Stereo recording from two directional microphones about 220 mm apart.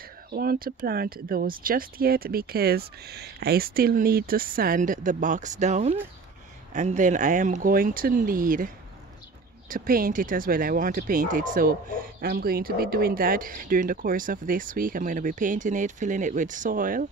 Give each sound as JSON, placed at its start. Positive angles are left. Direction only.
{"t": 0.3, "sound": "speech", "side_deg": -40}